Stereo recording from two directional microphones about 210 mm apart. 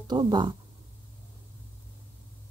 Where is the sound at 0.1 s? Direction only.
20° right (ahead or behind).